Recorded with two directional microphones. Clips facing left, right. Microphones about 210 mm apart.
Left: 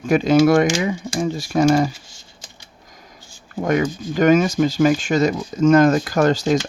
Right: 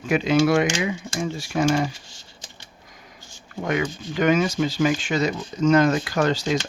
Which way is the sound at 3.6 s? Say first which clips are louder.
Left 5 dB; 45° left (ahead or behind).